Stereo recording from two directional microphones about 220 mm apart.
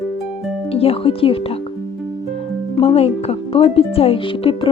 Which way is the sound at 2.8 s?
25° left (ahead or behind).